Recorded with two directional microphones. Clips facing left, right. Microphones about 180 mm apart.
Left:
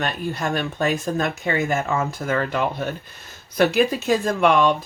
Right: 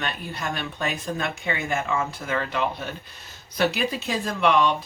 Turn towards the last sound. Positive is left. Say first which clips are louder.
# left 4 dB
turn(degrees=45)  # may be behind; listen again after turning